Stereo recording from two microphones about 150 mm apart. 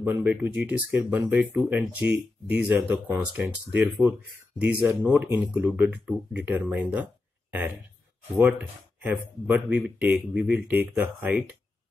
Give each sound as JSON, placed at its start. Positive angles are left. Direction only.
{"t": 0.0, "sound": "speech", "side_deg": -10}
{"t": 8.4, "sound": "speech", "side_deg": -10}